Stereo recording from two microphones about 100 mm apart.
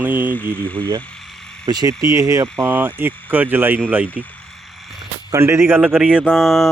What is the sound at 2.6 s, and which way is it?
Speech, 20° right (ahead or behind).